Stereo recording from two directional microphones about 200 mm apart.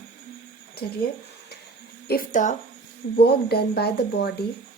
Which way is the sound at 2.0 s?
45° left (ahead or behind).